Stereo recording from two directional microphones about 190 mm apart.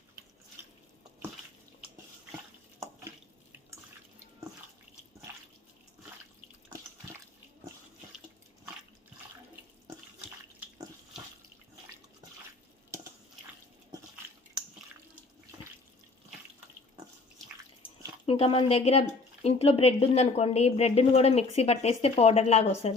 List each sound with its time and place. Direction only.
18.3 s a woman's voice: 30° left (ahead or behind)